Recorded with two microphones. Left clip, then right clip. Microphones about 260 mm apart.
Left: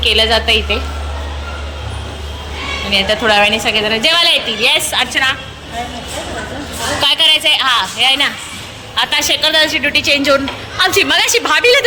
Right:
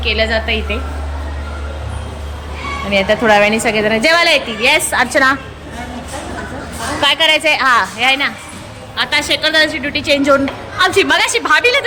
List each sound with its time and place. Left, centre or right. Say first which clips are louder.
0.0 s a woman's voice: left 4 dB; centre
2.9 s speech: right 1 dB; centre
7.0 s speech: left 1 dB; centre